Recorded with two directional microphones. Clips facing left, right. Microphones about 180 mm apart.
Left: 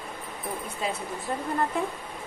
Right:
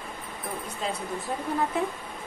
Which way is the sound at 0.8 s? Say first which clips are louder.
Right 1 dB; 5° left (ahead or behind).